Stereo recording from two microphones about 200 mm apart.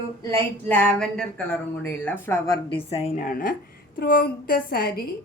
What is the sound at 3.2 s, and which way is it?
A woman's voice, 45° left (ahead or behind).